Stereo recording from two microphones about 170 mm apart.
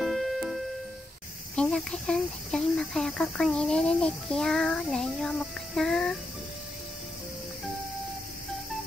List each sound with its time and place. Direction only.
0.0 s music: centre (ahead or behind)
1.5 s speech: 5° left (ahead or behind)